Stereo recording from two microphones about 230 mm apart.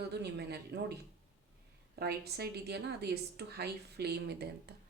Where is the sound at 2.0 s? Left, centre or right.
Right.